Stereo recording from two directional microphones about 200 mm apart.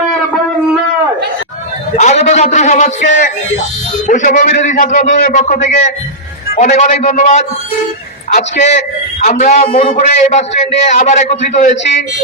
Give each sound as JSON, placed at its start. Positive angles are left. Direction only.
{"t": 2.0, "sound": "a man's voice", "side_deg": 35}